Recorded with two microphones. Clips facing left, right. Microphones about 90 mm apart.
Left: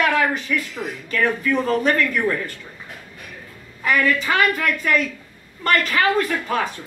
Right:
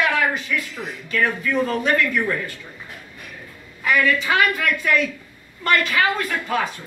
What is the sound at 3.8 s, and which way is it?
A woman's voice, 40° left (ahead or behind).